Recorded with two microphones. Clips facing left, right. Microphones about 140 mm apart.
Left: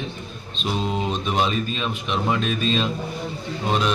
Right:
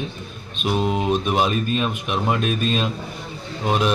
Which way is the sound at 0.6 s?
10° right (ahead or behind).